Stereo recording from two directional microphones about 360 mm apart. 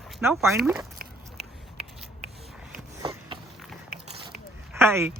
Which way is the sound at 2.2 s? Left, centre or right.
Centre.